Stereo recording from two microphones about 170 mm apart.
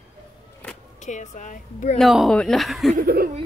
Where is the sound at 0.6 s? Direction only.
10° left (ahead or behind).